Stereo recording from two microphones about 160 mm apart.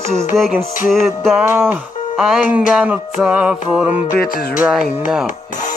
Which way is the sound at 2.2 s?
5° right (ahead or behind).